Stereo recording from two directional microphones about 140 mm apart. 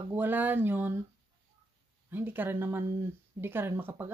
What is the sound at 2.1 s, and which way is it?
Speech, 15° right (ahead or behind).